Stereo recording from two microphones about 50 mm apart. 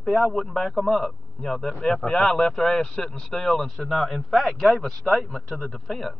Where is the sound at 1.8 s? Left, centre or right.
Centre.